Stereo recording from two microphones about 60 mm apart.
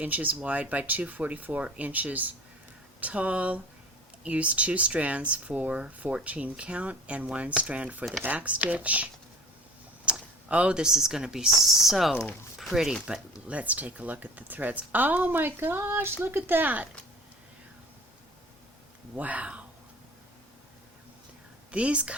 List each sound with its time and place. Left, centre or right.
0.0 s speech: right
10.1 s speech: centre
13.5 s speech: right
19.1 s speech: right
21.7 s speech: centre